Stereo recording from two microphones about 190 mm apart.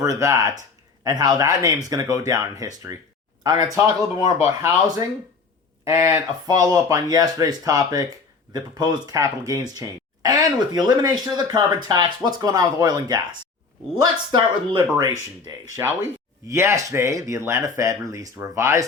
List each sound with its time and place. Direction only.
0.0 s speech: 15° right (ahead or behind)
6.0 s speech: 15° right (ahead or behind)